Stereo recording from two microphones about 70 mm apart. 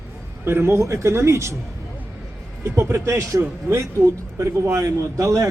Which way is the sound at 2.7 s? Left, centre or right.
Right.